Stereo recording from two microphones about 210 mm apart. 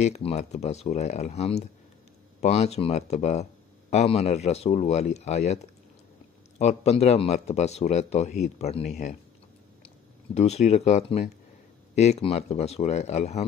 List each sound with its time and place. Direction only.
0.0 s speech: 30° left (ahead or behind)
10.3 s speech: 30° left (ahead or behind)